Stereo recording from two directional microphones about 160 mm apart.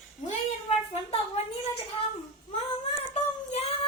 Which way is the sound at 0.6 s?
40° left (ahead or behind).